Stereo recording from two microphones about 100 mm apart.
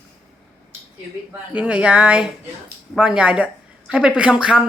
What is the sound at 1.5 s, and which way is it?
Speech, 10° right (ahead or behind).